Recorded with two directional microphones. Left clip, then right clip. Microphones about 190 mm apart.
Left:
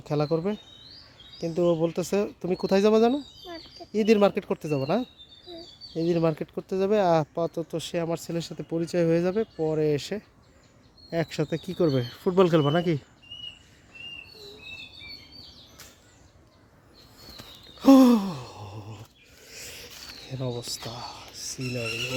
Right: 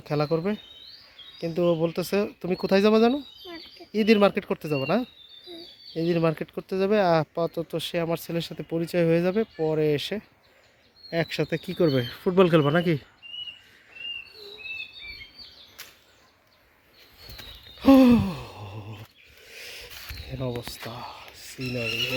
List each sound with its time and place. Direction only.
0.0 s speech: centre (ahead or behind)
5.9 s speech: 5° left (ahead or behind)
17.7 s gasp: 10° left (ahead or behind)
19.5 s a sound: centre (ahead or behind)